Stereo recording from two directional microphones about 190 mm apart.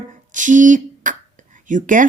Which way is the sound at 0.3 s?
40° right (ahead or behind).